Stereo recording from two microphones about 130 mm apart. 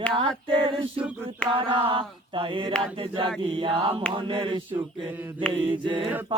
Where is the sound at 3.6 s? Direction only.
45° right (ahead or behind).